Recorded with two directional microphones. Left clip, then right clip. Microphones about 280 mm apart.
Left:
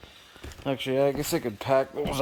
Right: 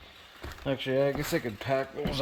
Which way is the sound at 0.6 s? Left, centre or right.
Centre.